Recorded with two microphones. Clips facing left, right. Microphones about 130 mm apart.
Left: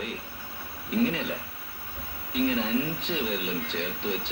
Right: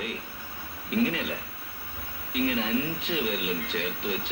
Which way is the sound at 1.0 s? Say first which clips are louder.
Left 2 dB; 5° right (ahead or behind).